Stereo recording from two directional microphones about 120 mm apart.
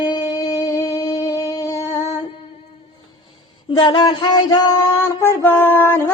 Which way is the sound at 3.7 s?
45° left (ahead or behind).